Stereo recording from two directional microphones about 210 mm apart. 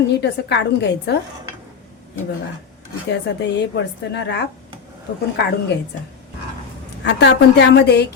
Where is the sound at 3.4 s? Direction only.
55° left (ahead or behind).